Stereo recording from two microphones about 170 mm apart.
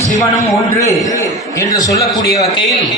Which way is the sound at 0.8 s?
20° left (ahead or behind).